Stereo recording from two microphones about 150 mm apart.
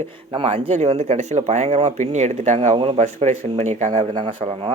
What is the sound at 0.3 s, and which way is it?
Speech, 45° right (ahead or behind).